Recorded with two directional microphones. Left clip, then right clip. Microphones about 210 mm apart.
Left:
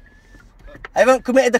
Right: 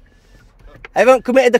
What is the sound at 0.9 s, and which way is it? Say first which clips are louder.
Speech: right 3 dB; 35° right (ahead or behind).